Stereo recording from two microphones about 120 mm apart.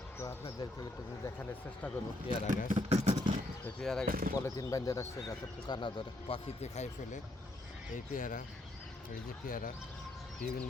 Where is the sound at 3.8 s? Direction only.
5° left (ahead or behind).